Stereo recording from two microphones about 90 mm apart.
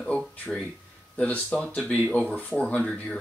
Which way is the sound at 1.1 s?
15° left (ahead or behind).